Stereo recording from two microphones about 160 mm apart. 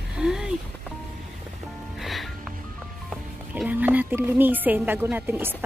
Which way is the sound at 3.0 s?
5° right (ahead or behind).